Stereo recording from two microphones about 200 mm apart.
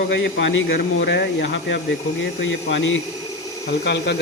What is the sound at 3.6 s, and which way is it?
Speech, 55° left (ahead or behind).